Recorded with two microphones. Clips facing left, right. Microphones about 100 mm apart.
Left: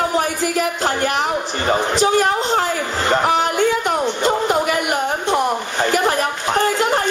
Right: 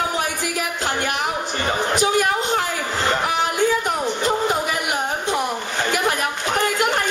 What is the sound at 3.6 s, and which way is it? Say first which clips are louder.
Music: left 3 dB; 70° left (ahead or behind).